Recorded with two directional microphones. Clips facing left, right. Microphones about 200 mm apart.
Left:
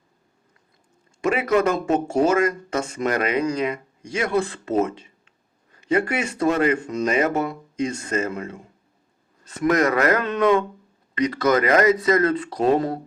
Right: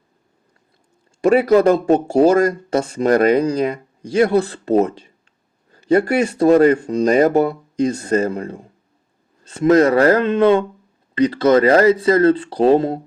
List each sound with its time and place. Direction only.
1.2 s speech: 35° right (ahead or behind)